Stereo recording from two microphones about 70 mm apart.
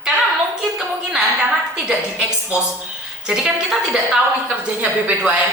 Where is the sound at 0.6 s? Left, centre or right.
Centre.